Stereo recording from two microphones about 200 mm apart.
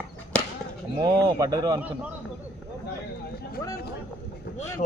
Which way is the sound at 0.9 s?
20° right (ahead or behind).